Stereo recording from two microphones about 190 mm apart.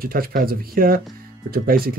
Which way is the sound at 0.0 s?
50° right (ahead or behind).